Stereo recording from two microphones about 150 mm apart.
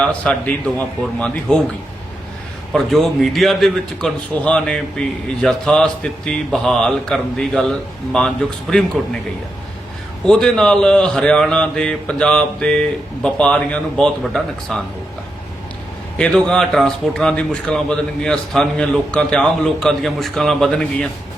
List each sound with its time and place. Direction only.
0.0 s a man's voice: 10° left (ahead or behind)
2.7 s a man's voice: centre (ahead or behind)
10.2 s a man's voice: 5° left (ahead or behind)
16.1 s a man's voice: 5° left (ahead or behind)